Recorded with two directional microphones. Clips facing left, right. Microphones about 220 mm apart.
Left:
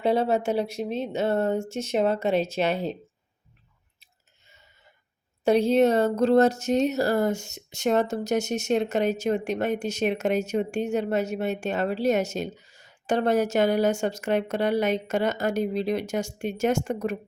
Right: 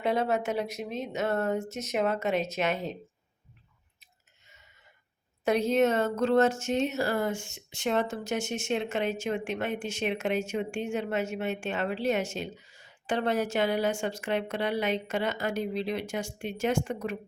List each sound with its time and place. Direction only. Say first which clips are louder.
0.0 s speech: left 5 dB; 30° left (ahead or behind)
5.5 s speech: left 5 dB; 30° left (ahead or behind)